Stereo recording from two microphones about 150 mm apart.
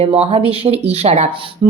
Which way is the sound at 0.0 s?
40° right (ahead or behind).